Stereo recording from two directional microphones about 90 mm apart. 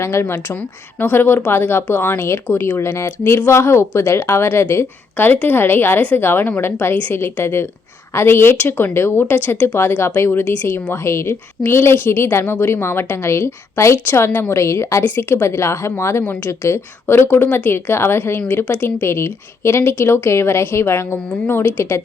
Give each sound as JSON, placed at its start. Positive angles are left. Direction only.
{"t": 0.0, "sound": "a woman's voice", "side_deg": 30}